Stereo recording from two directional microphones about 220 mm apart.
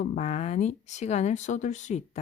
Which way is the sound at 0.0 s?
30° left (ahead or behind).